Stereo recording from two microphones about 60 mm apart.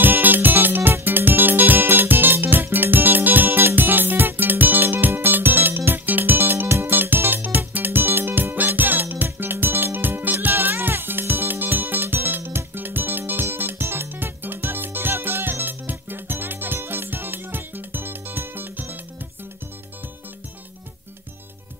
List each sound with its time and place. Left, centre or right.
0.0 s music: right